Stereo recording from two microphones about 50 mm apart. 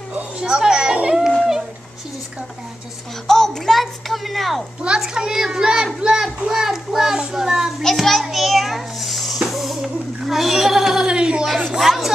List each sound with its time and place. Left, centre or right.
0.4 s children playing: centre
1.1 s a sound: centre
3.3 s speech: centre
4.8 s a child's voice: centre
7.8 s a child's voice: centre
9.5 s a sound: centre
11.4 s speech: centre